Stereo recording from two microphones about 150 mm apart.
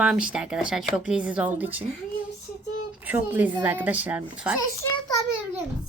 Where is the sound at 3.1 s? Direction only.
10° right (ahead or behind).